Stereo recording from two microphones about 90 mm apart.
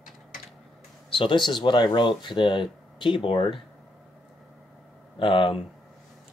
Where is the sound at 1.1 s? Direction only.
70° left (ahead or behind).